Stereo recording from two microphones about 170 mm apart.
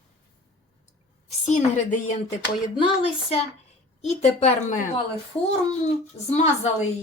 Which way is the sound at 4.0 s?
45° left (ahead or behind).